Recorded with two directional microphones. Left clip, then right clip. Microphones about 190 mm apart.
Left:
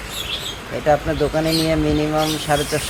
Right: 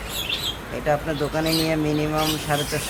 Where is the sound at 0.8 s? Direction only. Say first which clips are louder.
Left 6 dB; 20° left (ahead or behind).